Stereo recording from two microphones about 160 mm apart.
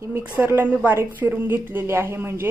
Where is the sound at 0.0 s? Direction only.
10° right (ahead or behind).